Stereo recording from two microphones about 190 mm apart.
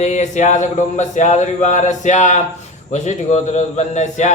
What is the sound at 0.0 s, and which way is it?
A man's voice, 40° left (ahead or behind).